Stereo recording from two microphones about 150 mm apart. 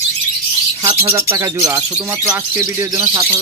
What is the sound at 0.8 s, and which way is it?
Speech, 20° right (ahead or behind).